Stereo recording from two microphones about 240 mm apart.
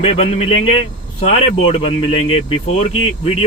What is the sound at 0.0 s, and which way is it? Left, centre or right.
Speech, left.